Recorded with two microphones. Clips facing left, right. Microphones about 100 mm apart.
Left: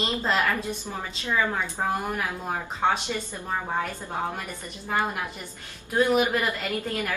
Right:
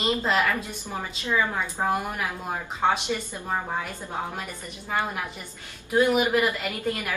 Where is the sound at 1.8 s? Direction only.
10° right (ahead or behind).